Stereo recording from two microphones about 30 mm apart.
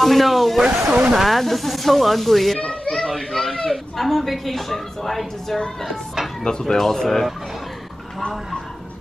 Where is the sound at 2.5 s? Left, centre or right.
Left.